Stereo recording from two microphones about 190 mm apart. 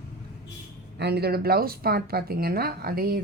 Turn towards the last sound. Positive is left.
turn(degrees=-50)  # may be behind; listen again after turning